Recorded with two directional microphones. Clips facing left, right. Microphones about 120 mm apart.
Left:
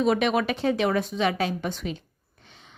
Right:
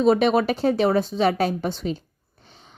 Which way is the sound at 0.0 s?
35° right (ahead or behind).